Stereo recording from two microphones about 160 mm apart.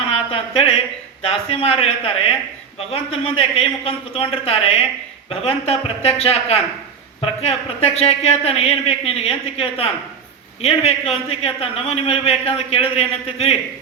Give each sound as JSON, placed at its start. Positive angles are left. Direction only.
{"t": 0.1, "sound": "a man's voice", "side_deg": 35}